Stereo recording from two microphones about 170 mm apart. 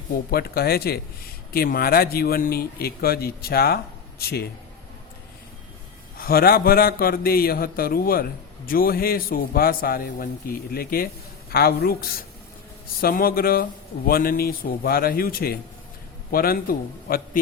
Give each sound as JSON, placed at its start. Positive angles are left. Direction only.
{"t": 0.3, "sound": "a man's voice", "side_deg": 65}
{"t": 6.1, "sound": "a man's voice", "side_deg": 60}